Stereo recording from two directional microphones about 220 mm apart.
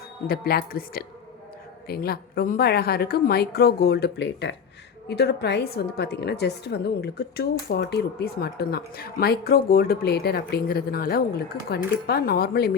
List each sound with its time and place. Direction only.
0.3 s a woman's voice: 45° left (ahead or behind)